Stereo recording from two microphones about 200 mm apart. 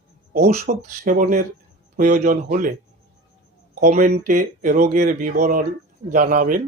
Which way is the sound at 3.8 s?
40° right (ahead or behind).